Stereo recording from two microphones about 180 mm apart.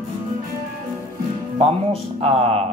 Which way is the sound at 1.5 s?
35° right (ahead or behind).